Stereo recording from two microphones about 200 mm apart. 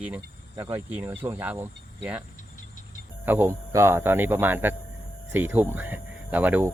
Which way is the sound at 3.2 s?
10° right (ahead or behind).